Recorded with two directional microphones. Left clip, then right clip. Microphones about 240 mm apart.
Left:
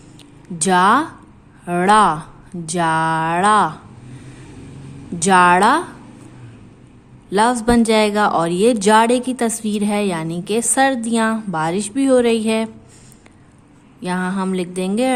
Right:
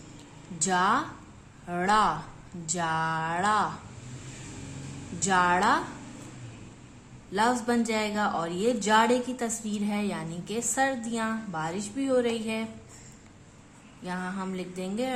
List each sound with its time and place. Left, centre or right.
0.6 s speech: left
5.2 s speech: left
7.3 s speech: left
14.0 s speech: left